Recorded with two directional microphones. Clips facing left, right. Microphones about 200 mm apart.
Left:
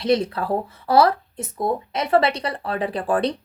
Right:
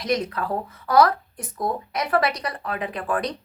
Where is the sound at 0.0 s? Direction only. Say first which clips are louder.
Left 4 dB; 30° left (ahead or behind).